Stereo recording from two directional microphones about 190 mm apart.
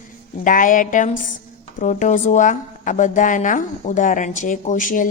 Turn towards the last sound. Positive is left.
turn(degrees=45)  # may be behind; listen again after turning